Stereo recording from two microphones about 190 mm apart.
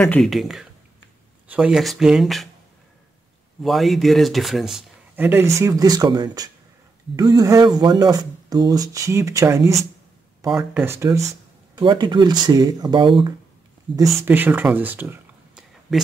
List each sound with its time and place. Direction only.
0.0 s speech: 5° left (ahead or behind)
3.6 s speech: centre (ahead or behind); by 13.3 s 25° right (ahead or behind)
14.2 s speech: 10° right (ahead or behind)